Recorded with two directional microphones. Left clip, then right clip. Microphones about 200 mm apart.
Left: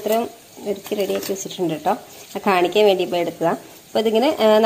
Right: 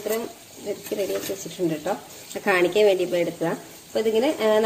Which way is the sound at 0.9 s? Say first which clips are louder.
Left 4 dB; 40° left (ahead or behind).